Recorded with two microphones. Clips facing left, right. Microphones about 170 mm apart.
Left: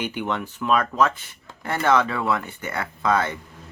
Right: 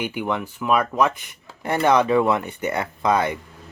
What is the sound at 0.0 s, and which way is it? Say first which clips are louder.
Speech: right 2 dB; 10° right (ahead or behind).